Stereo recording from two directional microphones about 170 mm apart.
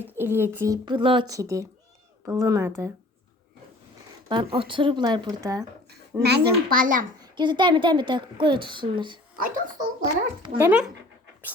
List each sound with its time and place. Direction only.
0.0 s a woman's voice: 15° right (ahead or behind)
4.3 s a woman's voice: 30° right (ahead or behind)
5.9 s a child's voice: 75° right (ahead or behind); by 7.0 s 55° right (ahead or behind)
7.2 s a woman's voice: 25° right (ahead or behind)
9.4 s a child's voice: 50° right (ahead or behind)
10.6 s speech: 5° right (ahead or behind)